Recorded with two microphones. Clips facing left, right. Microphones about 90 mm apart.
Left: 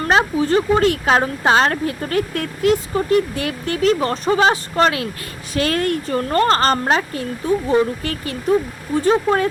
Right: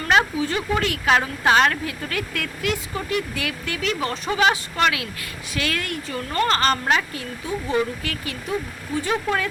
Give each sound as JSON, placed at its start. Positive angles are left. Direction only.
{"t": 0.0, "sound": "a woman's voice", "side_deg": 35}